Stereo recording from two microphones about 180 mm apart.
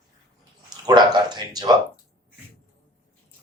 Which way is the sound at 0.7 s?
25° right (ahead or behind).